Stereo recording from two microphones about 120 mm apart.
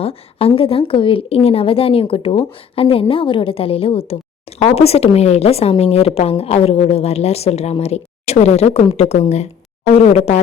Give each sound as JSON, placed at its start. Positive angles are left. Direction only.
{"t": 0.0, "sound": "a woman's voice", "side_deg": 55}